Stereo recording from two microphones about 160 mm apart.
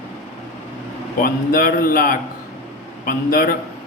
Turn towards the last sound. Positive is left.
turn(degrees=65)  # may be behind; listen again after turning